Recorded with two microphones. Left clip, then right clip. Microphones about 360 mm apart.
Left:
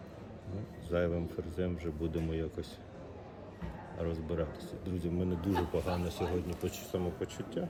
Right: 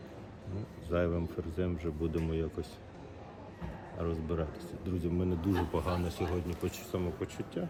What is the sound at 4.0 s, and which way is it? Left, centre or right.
Speech, centre.